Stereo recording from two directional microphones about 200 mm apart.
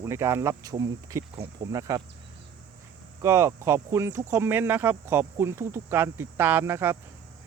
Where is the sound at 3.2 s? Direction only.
15° right (ahead or behind).